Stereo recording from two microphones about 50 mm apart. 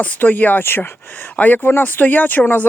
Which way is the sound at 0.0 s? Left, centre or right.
Left.